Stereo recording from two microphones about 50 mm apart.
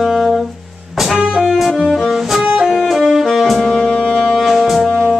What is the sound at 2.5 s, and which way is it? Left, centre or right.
Saxophone, centre.